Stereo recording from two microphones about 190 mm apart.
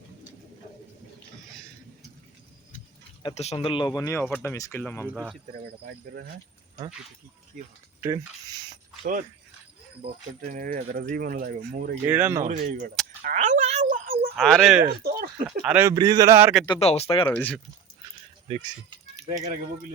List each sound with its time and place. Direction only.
3.2 s speech: 35° left (ahead or behind); by 5.0 s 10° left (ahead or behind)
5.5 s speech: 55° right (ahead or behind)
7.6 s speech: 40° right (ahead or behind)
10.4 s speech: 45° right (ahead or behind)
12.0 s speech: 10° right (ahead or behind)
12.4 s speech: 45° right (ahead or behind)
13.2 s a sound: 40° right (ahead or behind)
14.3 s speech: centre (ahead or behind)
15.0 s a sound: 55° right (ahead or behind)
15.4 s speech: 5° right (ahead or behind)
16.6 s speech: 30° left (ahead or behind)
17.2 s speech: 10° left (ahead or behind)
18.4 s speech: 30° right (ahead or behind)